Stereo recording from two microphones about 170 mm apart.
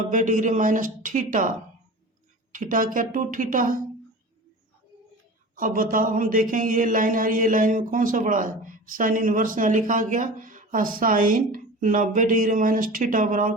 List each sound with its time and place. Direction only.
0.1 s speech: 50° right (ahead or behind)
5.5 s speech: 55° right (ahead or behind)